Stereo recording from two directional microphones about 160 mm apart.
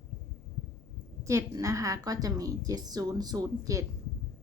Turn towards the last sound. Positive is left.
turn(degrees=-20)  # may be behind; listen again after turning